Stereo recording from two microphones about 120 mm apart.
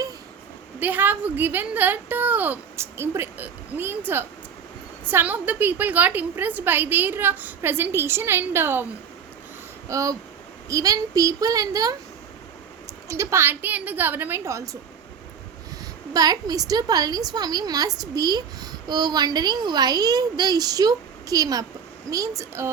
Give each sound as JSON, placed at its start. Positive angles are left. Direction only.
{"t": 0.8, "sound": "a woman's voice", "side_deg": -15}
{"t": 9.9, "sound": "a woman's voice", "side_deg": -30}
{"t": 13.1, "sound": "a woman's voice", "side_deg": -25}
{"t": 16.1, "sound": "a woman's voice", "side_deg": -30}